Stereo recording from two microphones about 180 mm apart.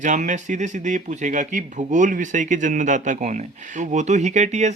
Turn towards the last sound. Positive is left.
turn(degrees=-40)  # may be behind; listen again after turning